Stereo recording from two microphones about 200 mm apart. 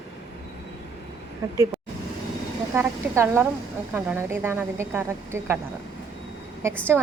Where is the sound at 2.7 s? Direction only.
10° right (ahead or behind).